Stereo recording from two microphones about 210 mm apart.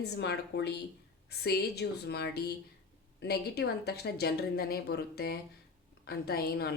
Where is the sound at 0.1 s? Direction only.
55° left (ahead or behind).